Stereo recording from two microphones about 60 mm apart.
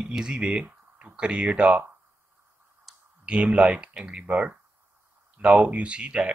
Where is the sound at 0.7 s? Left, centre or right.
Right.